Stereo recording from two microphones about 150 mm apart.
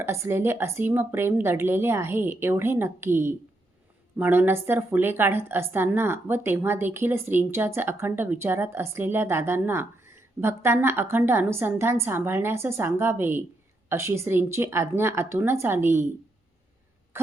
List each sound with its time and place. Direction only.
0.0 s a woman's voice: 15° right (ahead or behind)